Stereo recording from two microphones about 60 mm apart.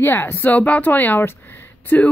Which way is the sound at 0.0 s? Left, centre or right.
Left.